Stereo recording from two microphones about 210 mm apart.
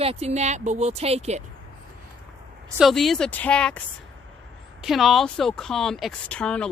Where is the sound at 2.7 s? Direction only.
Centre (ahead or behind).